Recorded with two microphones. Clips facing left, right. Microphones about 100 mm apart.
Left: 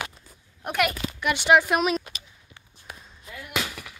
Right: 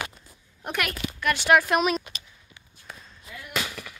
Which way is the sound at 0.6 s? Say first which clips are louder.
Left 4 dB; 10° left (ahead or behind).